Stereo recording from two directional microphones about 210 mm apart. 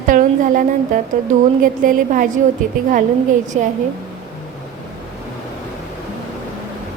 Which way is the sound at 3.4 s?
35° right (ahead or behind).